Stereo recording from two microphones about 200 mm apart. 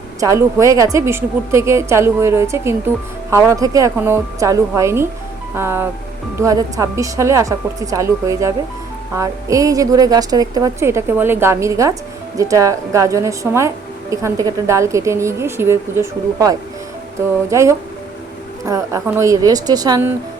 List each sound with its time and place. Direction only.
0.2 s a woman's voice: 15° right (ahead or behind)